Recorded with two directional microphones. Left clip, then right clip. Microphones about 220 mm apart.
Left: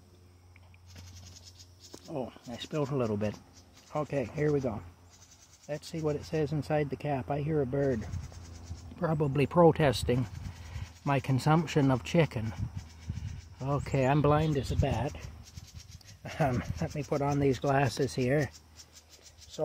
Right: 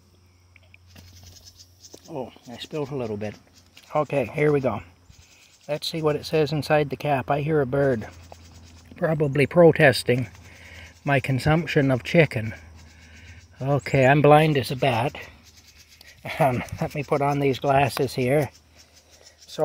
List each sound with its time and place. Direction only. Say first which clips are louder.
1.2 s a sound: right 4 dB; 20° right (ahead or behind)
2.1 s speech: right 4 dB; 10° left (ahead or behind)
3.9 s speech: right 10 dB; 15° right (ahead or behind)
6.1 s speech: right 9 dB; 20° right (ahead or behind)
8.9 s speech: right 8 dB; 10° right (ahead or behind)
13.6 s speech: right 10 dB; 15° right (ahead or behind)
16.2 s speech: right 9 dB; 20° right (ahead or behind)